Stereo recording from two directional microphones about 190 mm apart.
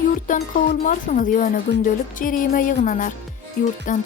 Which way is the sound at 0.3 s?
45° left (ahead or behind).